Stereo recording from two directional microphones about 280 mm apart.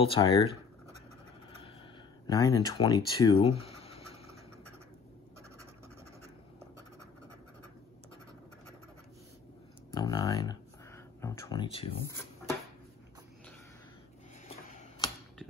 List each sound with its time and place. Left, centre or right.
0.0 s speech: centre
2.2 s speech: centre
9.9 s a sound: centre